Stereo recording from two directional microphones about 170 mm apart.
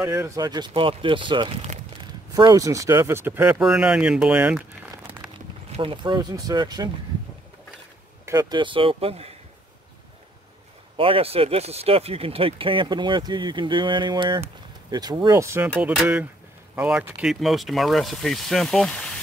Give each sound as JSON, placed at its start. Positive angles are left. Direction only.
{"t": 0.0, "sound": "speech", "side_deg": -20}
{"t": 5.7, "sound": "speech", "side_deg": -30}
{"t": 8.3, "sound": "speech", "side_deg": -25}
{"t": 11.0, "sound": "speech", "side_deg": -35}